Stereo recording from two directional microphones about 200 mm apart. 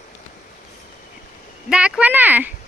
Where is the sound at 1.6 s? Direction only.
5° right (ahead or behind).